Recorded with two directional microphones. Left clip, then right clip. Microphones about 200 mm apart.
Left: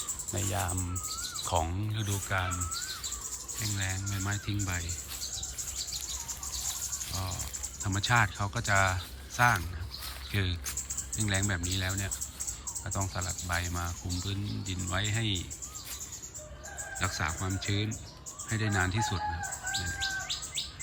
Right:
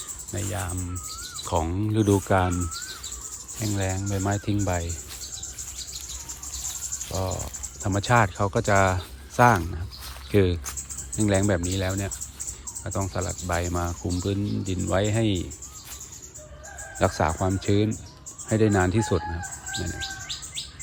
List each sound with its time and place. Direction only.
0.3 s speech: 20° left (ahead or behind); by 2.5 s centre (ahead or behind)
3.6 s speech: centre (ahead or behind)
7.1 s speech: centre (ahead or behind)
17.0 s speech: centre (ahead or behind)